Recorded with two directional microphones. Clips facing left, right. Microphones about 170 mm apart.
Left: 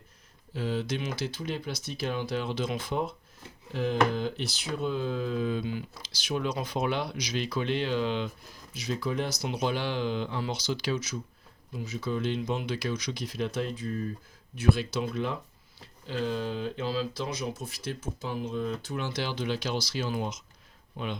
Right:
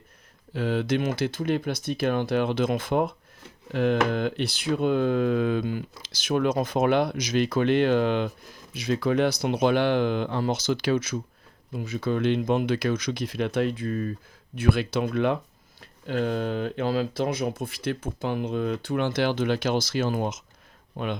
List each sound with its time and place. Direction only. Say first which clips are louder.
0.5 s speech: right 6 dB; 65° right (ahead or behind)